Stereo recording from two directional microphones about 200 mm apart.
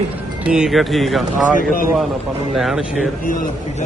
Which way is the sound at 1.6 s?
45° left (ahead or behind).